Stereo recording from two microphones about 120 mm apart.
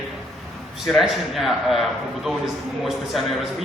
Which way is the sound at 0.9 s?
Centre (ahead or behind).